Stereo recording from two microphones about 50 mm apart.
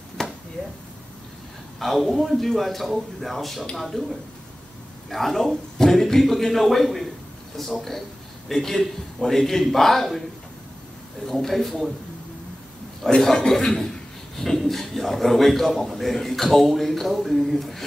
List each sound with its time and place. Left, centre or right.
0.2 s a sound: centre
0.6 s speech: left
1.8 s a man's voice: centre
5.1 s a man's voice: centre
8.5 s a man's voice: centre
11.2 s a man's voice: centre
13.1 s a man's voice: centre